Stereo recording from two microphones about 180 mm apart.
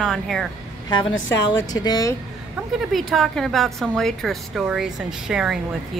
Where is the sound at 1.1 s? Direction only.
90° left.